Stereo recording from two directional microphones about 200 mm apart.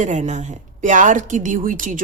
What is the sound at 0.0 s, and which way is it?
A woman's voice, 35° right (ahead or behind).